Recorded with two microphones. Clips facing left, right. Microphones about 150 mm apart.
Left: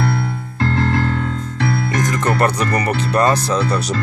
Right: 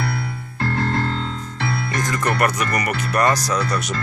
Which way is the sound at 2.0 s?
20° left (ahead or behind).